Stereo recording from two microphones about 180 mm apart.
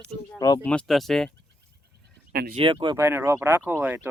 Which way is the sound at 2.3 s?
60° right (ahead or behind).